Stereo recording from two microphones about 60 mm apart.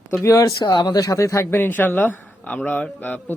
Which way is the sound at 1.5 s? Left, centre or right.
Left.